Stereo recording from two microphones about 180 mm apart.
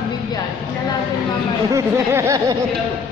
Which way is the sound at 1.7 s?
15° right (ahead or behind).